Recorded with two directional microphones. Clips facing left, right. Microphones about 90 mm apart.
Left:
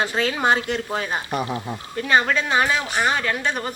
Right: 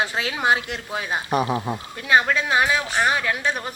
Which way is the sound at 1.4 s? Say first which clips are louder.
Right 3 dB; 25° right (ahead or behind).